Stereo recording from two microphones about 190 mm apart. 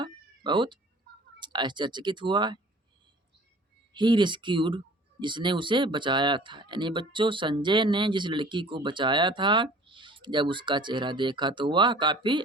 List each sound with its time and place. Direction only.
0.0 s cat: 25° right (ahead or behind)
1.4 s speech: 25° right (ahead or behind)
3.9 s speech: 25° right (ahead or behind)